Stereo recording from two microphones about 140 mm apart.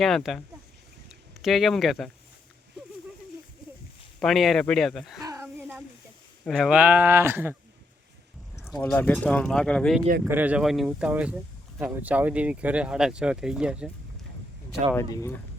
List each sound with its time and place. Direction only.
0.0 s speech: centre (ahead or behind)
4.2 s speech: centre (ahead or behind)
5.2 s a sound: 20° right (ahead or behind)
6.4 s speech: centre (ahead or behind); by 7.5 s 15° right (ahead or behind)
8.8 s speech: 10° left (ahead or behind)
10.2 s speech: 10° right (ahead or behind)
14.9 s speech: 20° left (ahead or behind)